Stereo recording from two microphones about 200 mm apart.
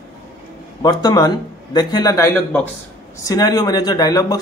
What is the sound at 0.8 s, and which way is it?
A man's voice, 20° left (ahead or behind).